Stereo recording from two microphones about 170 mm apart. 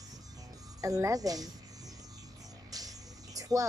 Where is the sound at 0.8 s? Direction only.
20° right (ahead or behind).